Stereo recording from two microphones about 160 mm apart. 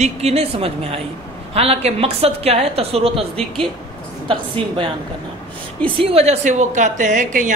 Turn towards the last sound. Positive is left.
turn(degrees=-50)  # may be behind; listen again after turning